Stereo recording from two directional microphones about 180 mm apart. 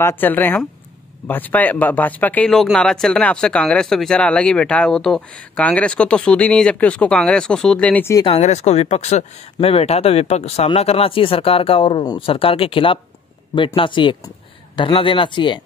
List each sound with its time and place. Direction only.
0.0 s speech: 10° left (ahead or behind)
8.3 s speech: 40° left (ahead or behind)